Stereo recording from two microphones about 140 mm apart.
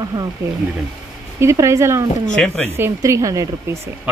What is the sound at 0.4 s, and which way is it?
Speech, 20° right (ahead or behind).